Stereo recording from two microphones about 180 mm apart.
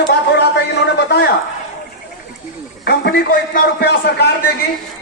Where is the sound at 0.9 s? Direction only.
65° left (ahead or behind).